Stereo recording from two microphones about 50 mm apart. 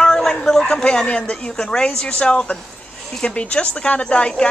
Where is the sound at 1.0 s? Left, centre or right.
Centre.